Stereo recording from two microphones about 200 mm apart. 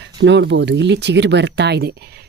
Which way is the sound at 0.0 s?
60° right (ahead or behind).